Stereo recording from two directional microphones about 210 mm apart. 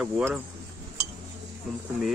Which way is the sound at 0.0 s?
5° right (ahead or behind).